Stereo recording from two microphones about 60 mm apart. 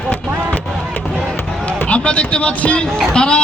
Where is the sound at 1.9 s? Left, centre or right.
Centre.